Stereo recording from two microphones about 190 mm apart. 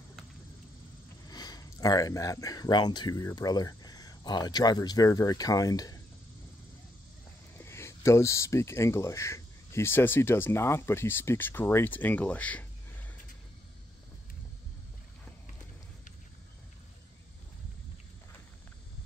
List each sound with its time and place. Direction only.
1.3 s speech: 20° left (ahead or behind)
7.5 s speech: 15° left (ahead or behind)